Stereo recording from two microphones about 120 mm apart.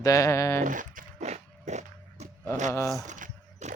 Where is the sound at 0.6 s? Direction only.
90° right; by 2.2 s 70° right (ahead or behind).